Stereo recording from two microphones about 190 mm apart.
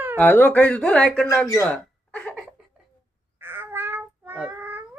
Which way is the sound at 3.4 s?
10° right (ahead or behind).